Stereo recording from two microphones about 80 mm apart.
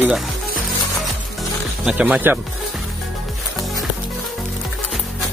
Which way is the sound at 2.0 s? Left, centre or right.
Centre.